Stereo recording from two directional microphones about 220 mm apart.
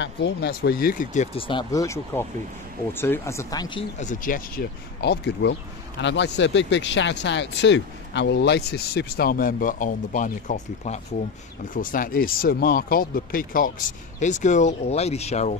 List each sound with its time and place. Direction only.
0.0 s speech: 50° left (ahead or behind); by 3.8 s 20° left (ahead or behind)
4.0 s speech: 35° left (ahead or behind)